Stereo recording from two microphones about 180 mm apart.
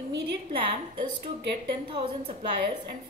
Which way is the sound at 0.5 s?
25° right (ahead or behind).